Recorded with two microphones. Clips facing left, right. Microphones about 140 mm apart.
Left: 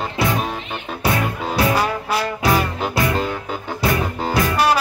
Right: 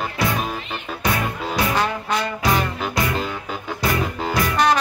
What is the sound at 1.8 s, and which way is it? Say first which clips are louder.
Trombone: left 2 dB; 5° left (ahead or behind).